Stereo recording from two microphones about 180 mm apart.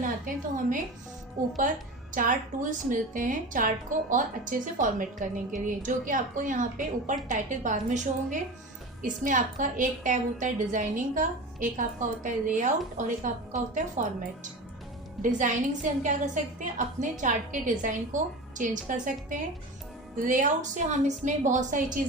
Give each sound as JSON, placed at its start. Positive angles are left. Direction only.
{"t": 0.3, "sound": "a woman's voice", "side_deg": -50}
{"t": 2.1, "sound": "a woman's voice", "side_deg": -45}
{"t": 15.2, "sound": "a woman's voice", "side_deg": -45}